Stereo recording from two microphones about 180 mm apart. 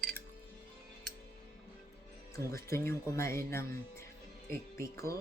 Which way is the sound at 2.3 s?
15° left (ahead or behind).